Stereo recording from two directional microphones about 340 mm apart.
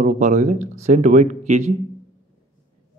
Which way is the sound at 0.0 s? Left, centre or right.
Right.